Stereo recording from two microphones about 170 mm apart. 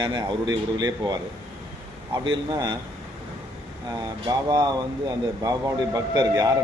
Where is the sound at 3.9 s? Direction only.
25° right (ahead or behind).